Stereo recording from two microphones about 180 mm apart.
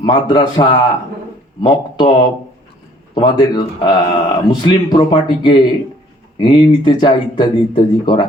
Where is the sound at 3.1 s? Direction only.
25° left (ahead or behind).